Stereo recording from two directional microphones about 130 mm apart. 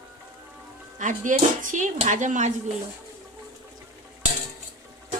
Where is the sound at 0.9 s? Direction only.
75° right (ahead or behind).